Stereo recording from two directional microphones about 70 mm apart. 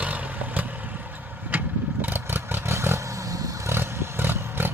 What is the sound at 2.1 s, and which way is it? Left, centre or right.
Vehicle, right.